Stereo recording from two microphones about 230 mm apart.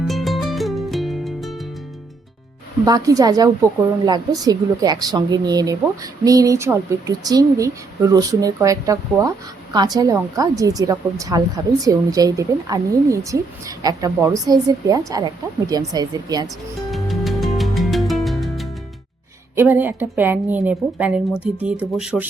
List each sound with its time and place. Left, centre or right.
0.1 s music: centre
2.8 s a woman's voice: centre
16.9 s music: centre
19.5 s a woman's voice: centre